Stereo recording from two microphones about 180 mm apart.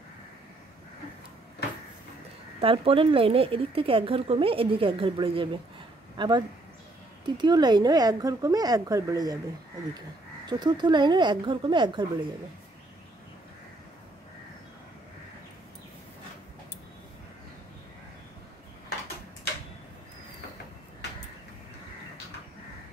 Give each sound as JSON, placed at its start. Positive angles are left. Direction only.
{"t": 2.6, "sound": "speech", "side_deg": -30}
{"t": 10.4, "sound": "speech", "side_deg": -25}